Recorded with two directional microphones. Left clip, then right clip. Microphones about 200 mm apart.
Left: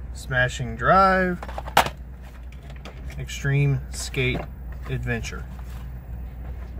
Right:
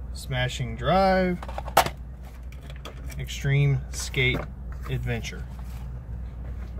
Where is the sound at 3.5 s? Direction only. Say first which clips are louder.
Left 1 dB; centre (ahead or behind).